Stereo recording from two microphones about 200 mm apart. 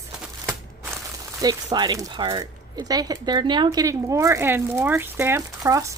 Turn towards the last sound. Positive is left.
turn(degrees=-15)  # may be behind; listen again after turning